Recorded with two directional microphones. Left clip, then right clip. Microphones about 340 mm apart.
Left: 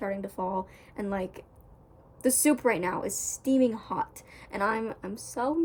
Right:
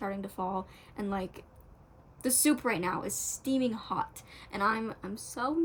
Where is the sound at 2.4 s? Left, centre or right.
Centre.